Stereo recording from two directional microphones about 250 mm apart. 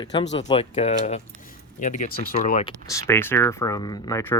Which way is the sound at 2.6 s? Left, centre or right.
Centre.